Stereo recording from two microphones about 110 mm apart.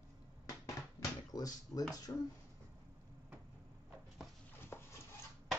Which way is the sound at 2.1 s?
30° left (ahead or behind).